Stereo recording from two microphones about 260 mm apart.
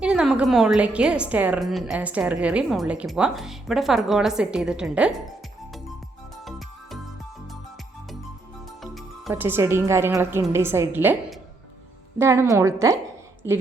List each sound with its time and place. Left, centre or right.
0.0 s a woman's voice: centre
8.8 s a woman's voice: centre